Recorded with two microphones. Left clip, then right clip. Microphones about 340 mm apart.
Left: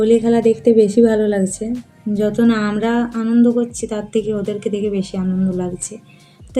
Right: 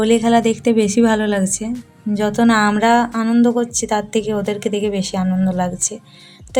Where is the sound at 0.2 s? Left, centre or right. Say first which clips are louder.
Left 1 dB; right.